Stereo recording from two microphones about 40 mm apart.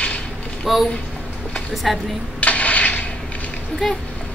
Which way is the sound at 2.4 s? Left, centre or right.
Left.